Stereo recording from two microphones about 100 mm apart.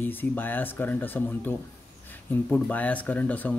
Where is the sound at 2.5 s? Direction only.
15° left (ahead or behind).